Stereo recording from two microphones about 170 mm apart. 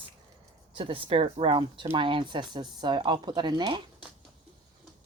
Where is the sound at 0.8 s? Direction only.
30° right (ahead or behind).